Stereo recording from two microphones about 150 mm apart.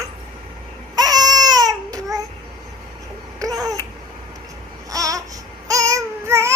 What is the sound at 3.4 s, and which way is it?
Babbling, 25° right (ahead or behind).